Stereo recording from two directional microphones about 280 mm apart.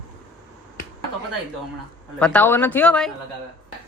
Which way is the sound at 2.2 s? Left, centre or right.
Centre.